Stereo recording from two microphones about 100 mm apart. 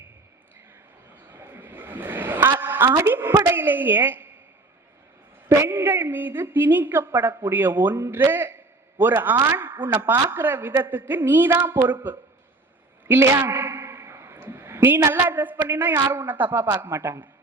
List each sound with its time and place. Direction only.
1.3 s a sound: 20° right (ahead or behind)
2.9 s a woman's voice: 25° right (ahead or behind)
5.5 s a woman's voice: 25° right (ahead or behind)
13.1 s a man's voice: 25° right (ahead or behind)